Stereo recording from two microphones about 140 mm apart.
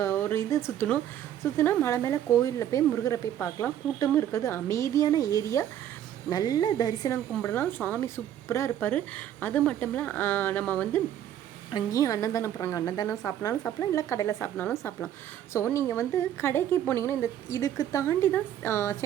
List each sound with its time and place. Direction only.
0.0 s speech: 15° left (ahead or behind)
7.4 s a woman's voice: 15° left (ahead or behind)
11.7 s a woman's voice: 25° left (ahead or behind)